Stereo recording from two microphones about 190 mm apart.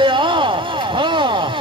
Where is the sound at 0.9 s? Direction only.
25° right (ahead or behind).